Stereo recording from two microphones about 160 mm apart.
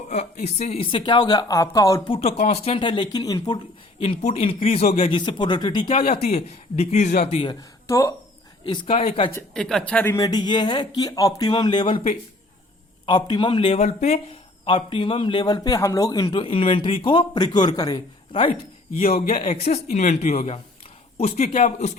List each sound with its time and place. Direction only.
0.1 s speech: 45° left (ahead or behind); by 2.0 s 20° left (ahead or behind)
2.0 s a man's voice: 40° left (ahead or behind)
4.0 s a man's voice: 45° left (ahead or behind)
6.1 s a man's voice: 40° left (ahead or behind)
7.9 s speech: 20° left (ahead or behind)
8.6 s a man's voice: 30° left (ahead or behind)
9.3 s speech: 5° left (ahead or behind)
10.2 s a man's voice: 25° left (ahead or behind); by 14.2 s 45° left (ahead or behind)
14.6 s a man's voice: 35° left (ahead or behind)